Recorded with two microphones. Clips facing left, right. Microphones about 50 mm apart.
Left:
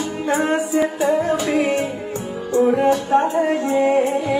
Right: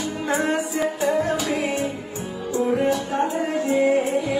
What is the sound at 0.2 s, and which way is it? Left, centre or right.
Music, left.